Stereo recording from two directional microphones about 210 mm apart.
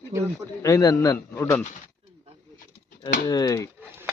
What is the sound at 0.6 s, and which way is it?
Speech, 15° left (ahead or behind).